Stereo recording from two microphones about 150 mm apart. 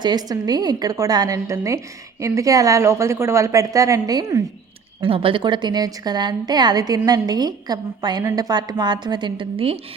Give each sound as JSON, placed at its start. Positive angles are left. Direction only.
{"t": 0.0, "sound": "a woman's voice", "side_deg": -25}
{"t": 4.9, "sound": "a woman's voice", "side_deg": -35}